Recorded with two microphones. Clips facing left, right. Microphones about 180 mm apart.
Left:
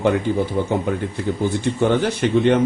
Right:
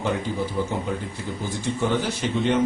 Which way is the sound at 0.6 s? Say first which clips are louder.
Left 4 dB; 45° left (ahead or behind).